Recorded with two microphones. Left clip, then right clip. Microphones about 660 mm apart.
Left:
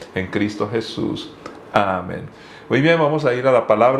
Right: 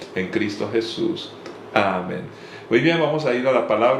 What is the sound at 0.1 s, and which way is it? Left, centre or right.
Speech, left.